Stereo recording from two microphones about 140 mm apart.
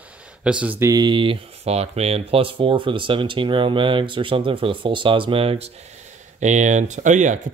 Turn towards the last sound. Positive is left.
turn(degrees=-60)  # may be behind; listen again after turning